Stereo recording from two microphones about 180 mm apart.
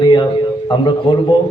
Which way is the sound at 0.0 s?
25° left (ahead or behind).